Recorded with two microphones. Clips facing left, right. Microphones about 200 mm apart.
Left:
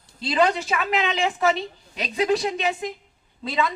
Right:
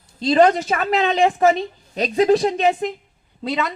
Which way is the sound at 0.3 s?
45° right (ahead or behind).